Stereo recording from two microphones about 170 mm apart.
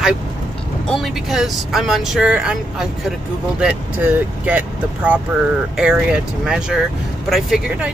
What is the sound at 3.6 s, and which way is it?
Speech, 5° right (ahead or behind).